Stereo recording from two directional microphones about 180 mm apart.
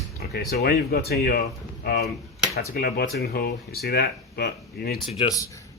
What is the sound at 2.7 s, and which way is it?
Speech, 55° left (ahead or behind).